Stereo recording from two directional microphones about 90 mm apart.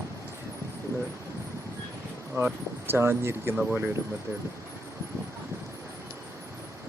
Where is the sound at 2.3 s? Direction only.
25° right (ahead or behind).